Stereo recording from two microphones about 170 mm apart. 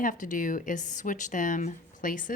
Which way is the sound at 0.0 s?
50° left (ahead or behind).